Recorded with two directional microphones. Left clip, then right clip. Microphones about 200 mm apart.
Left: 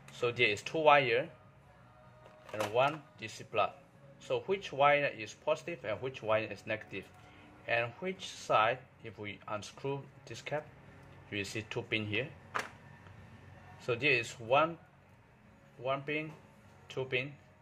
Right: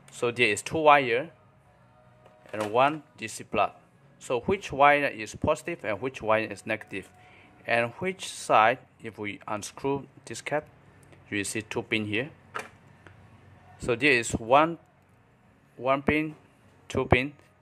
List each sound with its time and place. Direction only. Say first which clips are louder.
0.1 s speech: right 6 dB; 30° right (ahead or behind)
2.5 s speech: right 7 dB; 30° right (ahead or behind)
13.7 s speech: right 7 dB; 35° right (ahead or behind)
15.8 s speech: right 10 dB; 35° right (ahead or behind)